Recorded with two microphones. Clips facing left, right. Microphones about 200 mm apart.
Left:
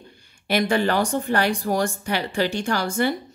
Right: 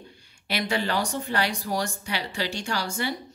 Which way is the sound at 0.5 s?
50° left (ahead or behind).